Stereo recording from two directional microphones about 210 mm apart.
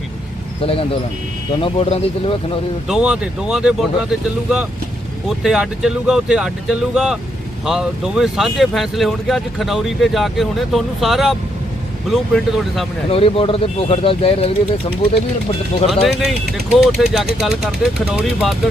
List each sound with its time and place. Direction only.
0.6 s speech: 25° left (ahead or behind)
2.8 s speech: 5° right (ahead or behind)
13.1 s speech: 25° left (ahead or behind)
15.9 s speech: centre (ahead or behind)